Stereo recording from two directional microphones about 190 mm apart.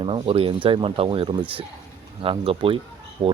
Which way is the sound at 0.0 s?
30° right (ahead or behind).